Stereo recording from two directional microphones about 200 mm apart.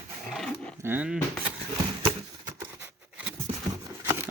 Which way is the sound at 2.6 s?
10° right (ahead or behind).